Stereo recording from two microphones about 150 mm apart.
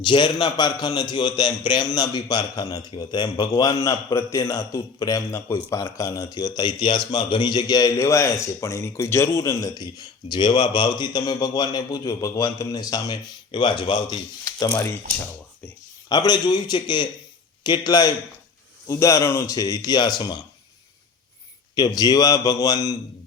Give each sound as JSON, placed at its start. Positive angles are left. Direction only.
{"t": 0.0, "sound": "a man's voice", "side_deg": 35}
{"t": 16.0, "sound": "a man's voice", "side_deg": 25}
{"t": 21.8, "sound": "a man's voice", "side_deg": 25}